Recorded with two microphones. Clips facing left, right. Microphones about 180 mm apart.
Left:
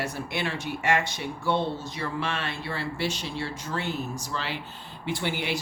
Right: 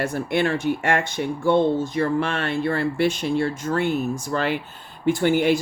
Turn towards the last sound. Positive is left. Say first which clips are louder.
# right 11 dB
turn(degrees=-50)  # may be behind; listen again after turning